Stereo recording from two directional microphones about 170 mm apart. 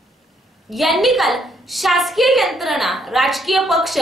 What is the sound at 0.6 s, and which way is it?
A woman's voice, centre (ahead or behind).